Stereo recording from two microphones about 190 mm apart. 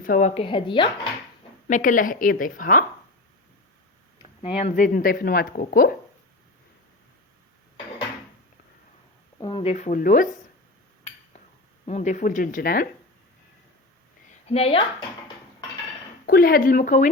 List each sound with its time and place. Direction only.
0.0 s a woman's voice: 45° left (ahead or behind)
0.4 s speech: 25° left (ahead or behind)
1.6 s speech: 40° left (ahead or behind)
4.2 s a sound: 30° left (ahead or behind)
4.7 s speech: 45° left (ahead or behind)
9.4 s speech: 30° left (ahead or behind); by 10.2 s 45° left (ahead or behind)
11.9 s speech: 40° left (ahead or behind)
14.4 s a woman's voice: 30° left (ahead or behind)
16.2 s speech: 50° left (ahead or behind)